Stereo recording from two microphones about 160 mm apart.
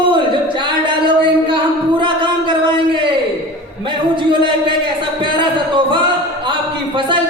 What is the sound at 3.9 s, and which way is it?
A man's voice, 30° right (ahead or behind).